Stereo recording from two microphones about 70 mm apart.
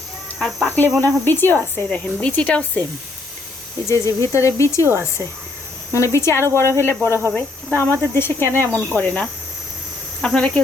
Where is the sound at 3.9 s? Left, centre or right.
Left.